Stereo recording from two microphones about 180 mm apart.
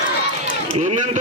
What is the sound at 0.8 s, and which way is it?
Speech, 40° right (ahead or behind).